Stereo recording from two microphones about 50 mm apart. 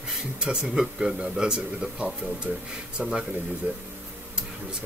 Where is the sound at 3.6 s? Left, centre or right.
Right.